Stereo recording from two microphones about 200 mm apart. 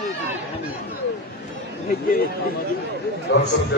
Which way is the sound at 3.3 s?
60° left (ahead or behind).